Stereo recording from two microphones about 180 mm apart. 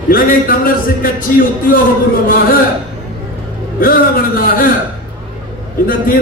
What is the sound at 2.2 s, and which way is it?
Speech, 55° left (ahead or behind).